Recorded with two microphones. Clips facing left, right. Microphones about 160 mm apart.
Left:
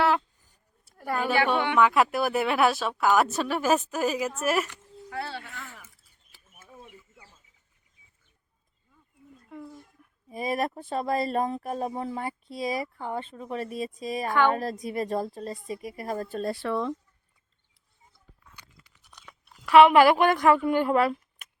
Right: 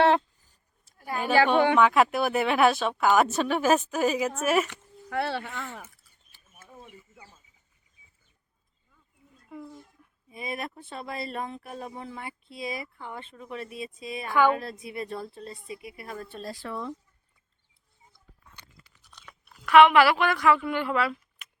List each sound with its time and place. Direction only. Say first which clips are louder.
0.9 s chatter: left 3 dB; 60° left (ahead or behind)
1.5 s speech: right 4 dB; 35° right (ahead or behind)
1.8 s speech: right 1 dB; centre (ahead or behind)
4.7 s speech: right 4 dB; 65° right (ahead or behind)
9.5 s speech: even; centre (ahead or behind)
10.2 s speech: left 7 dB; 40° left (ahead or behind); by 16.9 s 85° left
18.8 s a sound: even; 15° left (ahead or behind)
19.6 s speech: left 1 dB; 35° left (ahead or behind)